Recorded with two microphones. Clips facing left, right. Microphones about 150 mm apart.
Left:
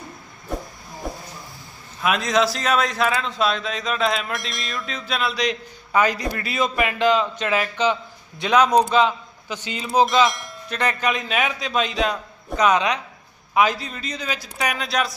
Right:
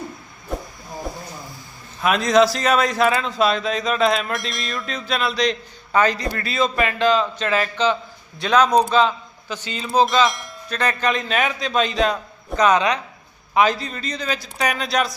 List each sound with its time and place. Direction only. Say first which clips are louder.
2.0 s a man's voice: right 4 dB; centre (ahead or behind); by 10.2 s 20° left (ahead or behind)
10.2 s bell: right 1 dB; centre (ahead or behind)
10.7 s a man's voice: right 1 dB; 15° left (ahead or behind)